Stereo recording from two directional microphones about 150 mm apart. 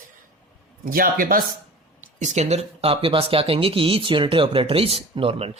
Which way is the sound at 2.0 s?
50° right (ahead or behind).